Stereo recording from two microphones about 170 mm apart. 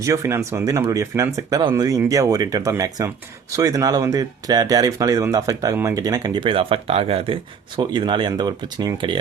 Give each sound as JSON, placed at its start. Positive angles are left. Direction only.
{"t": 0.0, "sound": "speech", "side_deg": -15}